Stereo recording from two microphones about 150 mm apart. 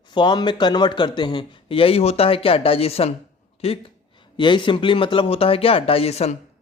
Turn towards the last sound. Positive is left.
turn(degrees=45)  # may be behind; listen again after turning